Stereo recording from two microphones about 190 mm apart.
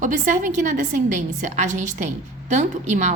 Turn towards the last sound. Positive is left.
turn(degrees=-40)  # may be behind; listen again after turning